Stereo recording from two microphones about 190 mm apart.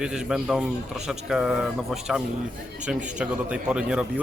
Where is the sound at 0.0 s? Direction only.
5° right (ahead or behind).